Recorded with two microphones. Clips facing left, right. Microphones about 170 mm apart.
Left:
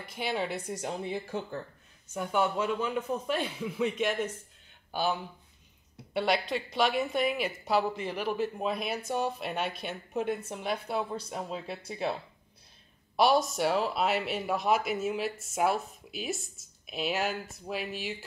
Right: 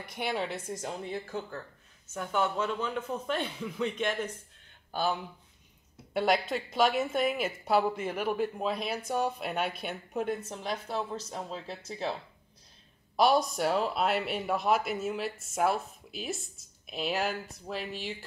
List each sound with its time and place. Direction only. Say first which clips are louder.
0.3 s speech: left 1 dB; 5° left (ahead or behind)
6.9 s speech: even; centre (ahead or behind)
7.2 s a woman's voice: even; 45° right (ahead or behind)
8.1 s speech: right 1 dB; 5° right (ahead or behind)